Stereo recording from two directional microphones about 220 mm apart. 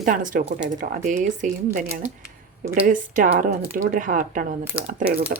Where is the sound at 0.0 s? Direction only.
35° right (ahead or behind).